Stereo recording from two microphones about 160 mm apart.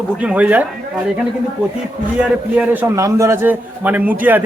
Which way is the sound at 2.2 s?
10° right (ahead or behind).